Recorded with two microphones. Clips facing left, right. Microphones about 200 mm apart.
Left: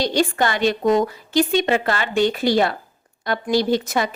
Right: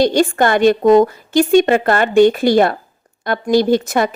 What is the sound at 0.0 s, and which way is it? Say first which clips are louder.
A woman's voice: right 6 dB; 50° right (ahead or behind).